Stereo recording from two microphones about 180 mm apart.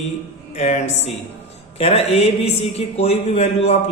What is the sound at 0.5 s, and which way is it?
A man's voice, 40° left (ahead or behind).